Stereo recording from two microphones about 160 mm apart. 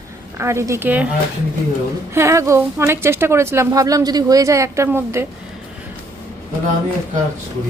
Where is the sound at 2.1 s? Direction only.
15° right (ahead or behind).